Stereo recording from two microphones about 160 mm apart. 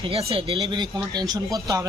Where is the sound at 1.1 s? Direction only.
25° right (ahead or behind).